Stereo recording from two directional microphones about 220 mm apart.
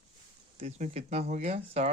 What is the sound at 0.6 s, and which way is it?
Speech, 30° right (ahead or behind).